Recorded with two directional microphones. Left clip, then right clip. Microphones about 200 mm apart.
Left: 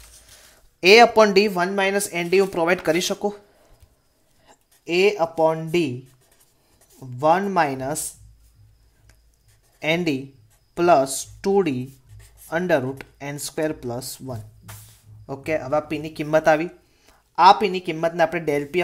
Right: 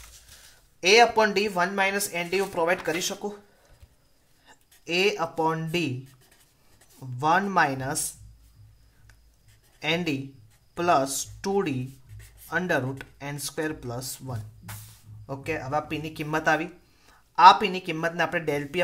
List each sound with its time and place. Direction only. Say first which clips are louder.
0.7 s speech: left 6 dB; 35° left (ahead or behind)
4.5 s speech: left 4 dB; 20° left (ahead or behind)
7.0 s speech: left 4 dB; 15° left (ahead or behind)
9.8 s speech: left 5 dB; 25° left (ahead or behind)
15.2 s speech: left 6 dB; 30° left (ahead or behind)